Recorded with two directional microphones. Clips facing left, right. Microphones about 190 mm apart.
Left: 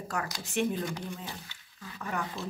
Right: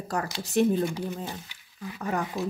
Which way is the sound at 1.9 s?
40° right (ahead or behind).